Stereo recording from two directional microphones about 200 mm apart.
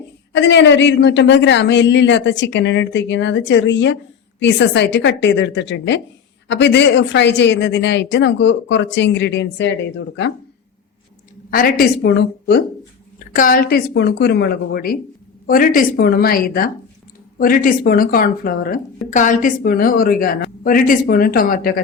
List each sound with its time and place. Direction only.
0.3 s a woman's voice: 60° left (ahead or behind)
11.5 s a woman's voice: 50° left (ahead or behind)
13.1 s speech: 45° left (ahead or behind)